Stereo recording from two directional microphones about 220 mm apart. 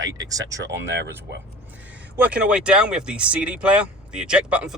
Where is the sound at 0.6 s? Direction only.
55° right (ahead or behind).